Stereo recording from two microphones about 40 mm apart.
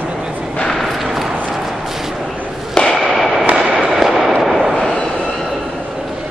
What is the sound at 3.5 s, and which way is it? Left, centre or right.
Fireworks, right.